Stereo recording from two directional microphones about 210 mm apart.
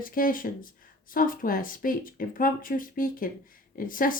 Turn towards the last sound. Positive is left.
turn(degrees=40)  # may be behind; listen again after turning